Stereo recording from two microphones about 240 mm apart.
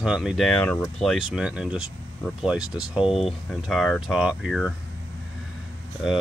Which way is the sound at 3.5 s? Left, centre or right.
Centre.